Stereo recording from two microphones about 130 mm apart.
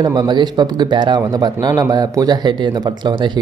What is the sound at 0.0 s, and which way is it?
Speech, 35° right (ahead or behind).